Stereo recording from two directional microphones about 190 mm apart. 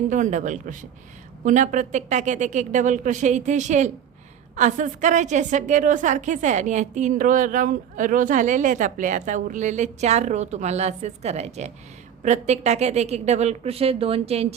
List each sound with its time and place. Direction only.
0.1 s a woman's voice: 40° right (ahead or behind)